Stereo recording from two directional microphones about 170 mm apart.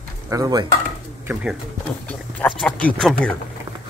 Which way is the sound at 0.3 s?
20° right (ahead or behind).